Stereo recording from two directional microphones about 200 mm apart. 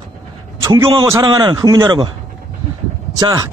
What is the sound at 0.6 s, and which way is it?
A man's voice, 20° right (ahead or behind).